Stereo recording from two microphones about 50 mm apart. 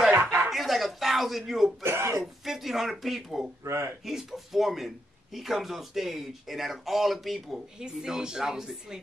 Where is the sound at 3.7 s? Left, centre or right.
Right.